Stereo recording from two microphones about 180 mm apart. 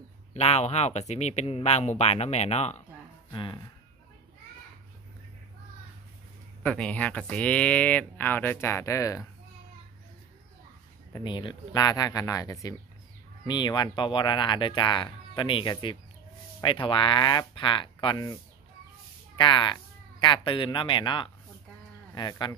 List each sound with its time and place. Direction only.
0.3 s speech: 35° left (ahead or behind)
3.3 s speech: 25° left (ahead or behind)
6.6 s speech: 5° left (ahead or behind)
11.1 s speech: 25° left (ahead or behind)